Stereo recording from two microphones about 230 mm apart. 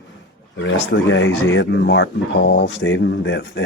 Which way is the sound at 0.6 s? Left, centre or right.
Left.